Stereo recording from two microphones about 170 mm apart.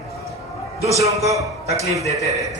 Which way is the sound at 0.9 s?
20° right (ahead or behind).